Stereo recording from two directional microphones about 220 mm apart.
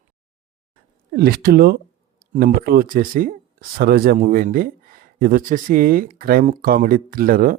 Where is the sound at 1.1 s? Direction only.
45° right (ahead or behind).